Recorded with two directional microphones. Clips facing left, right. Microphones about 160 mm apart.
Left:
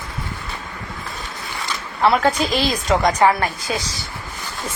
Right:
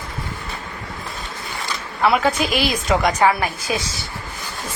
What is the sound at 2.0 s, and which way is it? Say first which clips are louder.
Speech: left 1 dB; centre (ahead or behind).